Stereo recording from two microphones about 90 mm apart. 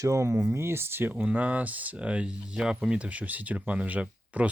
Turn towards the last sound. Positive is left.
turn(degrees=-15)  # may be behind; listen again after turning